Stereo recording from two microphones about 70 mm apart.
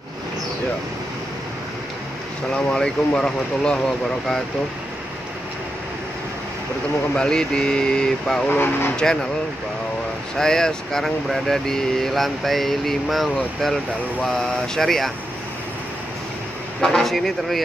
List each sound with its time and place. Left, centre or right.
2.5 s speech: centre
7.2 s speech: centre
8.5 s speech: left
8.9 s speech: centre
10.3 s speech: centre
16.8 s speech: centre